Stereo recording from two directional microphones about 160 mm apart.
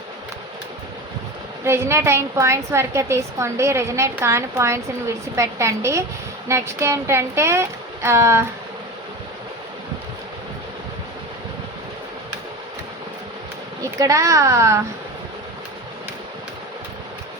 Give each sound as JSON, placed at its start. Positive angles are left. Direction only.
{"t": 1.6, "sound": "a woman's voice", "side_deg": -15}
{"t": 13.8, "sound": "a woman's voice", "side_deg": -20}